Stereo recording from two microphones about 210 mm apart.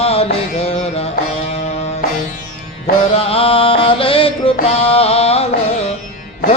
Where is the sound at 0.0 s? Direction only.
30° left (ahead or behind).